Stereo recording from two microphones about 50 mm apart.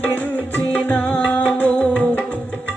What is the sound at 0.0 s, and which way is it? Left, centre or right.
Music, left.